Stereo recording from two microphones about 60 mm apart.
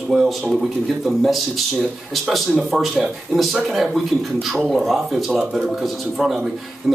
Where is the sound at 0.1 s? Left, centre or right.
Centre.